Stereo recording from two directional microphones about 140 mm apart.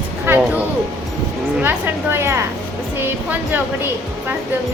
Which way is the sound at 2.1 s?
20° right (ahead or behind).